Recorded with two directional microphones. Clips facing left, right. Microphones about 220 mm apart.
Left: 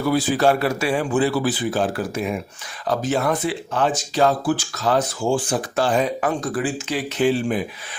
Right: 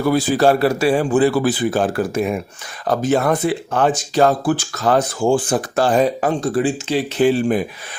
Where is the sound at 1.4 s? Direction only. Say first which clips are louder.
Right 4 dB; 50° right (ahead or behind); by 7.3 s 30° right (ahead or behind).